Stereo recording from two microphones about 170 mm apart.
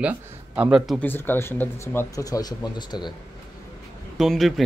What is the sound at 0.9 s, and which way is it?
Speech, 10° left (ahead or behind).